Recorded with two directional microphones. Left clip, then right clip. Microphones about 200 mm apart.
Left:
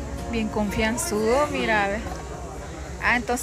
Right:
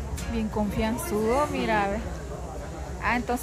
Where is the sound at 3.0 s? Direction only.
Centre (ahead or behind).